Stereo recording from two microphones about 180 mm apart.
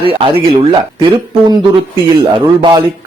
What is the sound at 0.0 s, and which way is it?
Speech, 30° right (ahead or behind).